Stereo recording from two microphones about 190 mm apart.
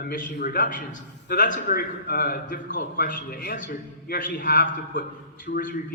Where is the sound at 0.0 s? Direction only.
45° left (ahead or behind).